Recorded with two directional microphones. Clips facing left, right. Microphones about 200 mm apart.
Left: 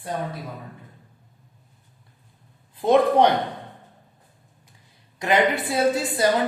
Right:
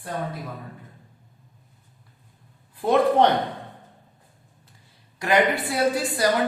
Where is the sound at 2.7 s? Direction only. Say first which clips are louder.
Left 2 dB; 20° left (ahead or behind).